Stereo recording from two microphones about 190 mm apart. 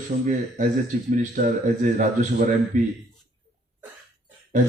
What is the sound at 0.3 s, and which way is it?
A man's voice, 40° right (ahead or behind).